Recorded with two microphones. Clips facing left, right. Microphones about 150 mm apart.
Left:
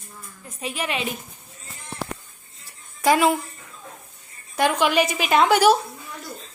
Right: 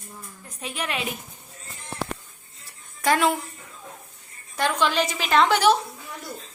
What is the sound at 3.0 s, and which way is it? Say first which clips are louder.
Speech: left 3 dB; 10° left (ahead or behind).